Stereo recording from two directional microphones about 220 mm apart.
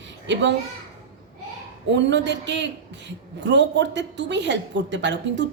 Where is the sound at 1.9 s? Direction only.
55° right (ahead or behind).